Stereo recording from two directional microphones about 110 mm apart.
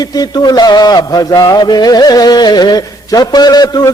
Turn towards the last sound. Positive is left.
turn(degrees=35)  # may be behind; listen again after turning